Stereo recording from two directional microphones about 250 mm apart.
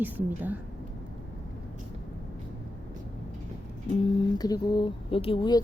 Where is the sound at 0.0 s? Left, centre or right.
Centre.